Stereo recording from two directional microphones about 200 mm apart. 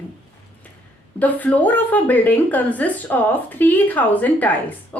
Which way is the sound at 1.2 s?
10° left (ahead or behind).